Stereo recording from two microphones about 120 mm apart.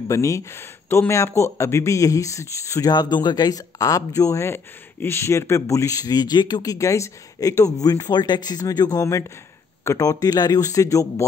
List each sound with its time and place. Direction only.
0.1 s speech: 25° left (ahead or behind)